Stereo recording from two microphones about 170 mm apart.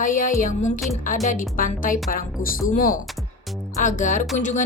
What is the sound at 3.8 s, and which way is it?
Music, 50° left (ahead or behind).